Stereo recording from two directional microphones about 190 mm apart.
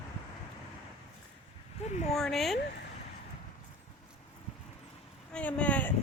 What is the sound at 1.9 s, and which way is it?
Speech, 40° left (ahead or behind).